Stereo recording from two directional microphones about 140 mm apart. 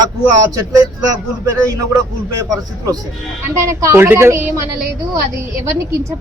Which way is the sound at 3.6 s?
20° right (ahead or behind).